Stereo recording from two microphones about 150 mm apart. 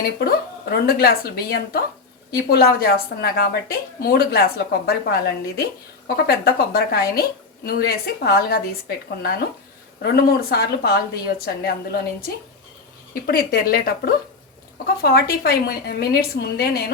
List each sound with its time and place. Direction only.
0.0 s a woman's voice: 90° left
10.0 s a woman's voice: 90° left
13.2 s a woman's voice: 85° left